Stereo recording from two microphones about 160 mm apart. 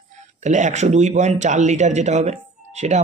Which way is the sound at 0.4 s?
50° right (ahead or behind).